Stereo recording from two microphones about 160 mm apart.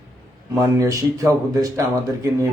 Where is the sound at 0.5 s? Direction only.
20° right (ahead or behind).